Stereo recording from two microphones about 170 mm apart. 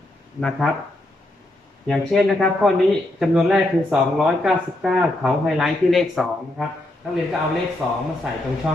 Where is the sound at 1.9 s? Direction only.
5° left (ahead or behind).